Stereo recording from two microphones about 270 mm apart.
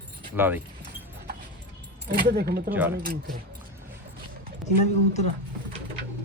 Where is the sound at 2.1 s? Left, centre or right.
Right.